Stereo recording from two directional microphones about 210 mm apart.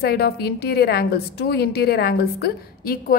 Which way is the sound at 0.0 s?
50° left (ahead or behind).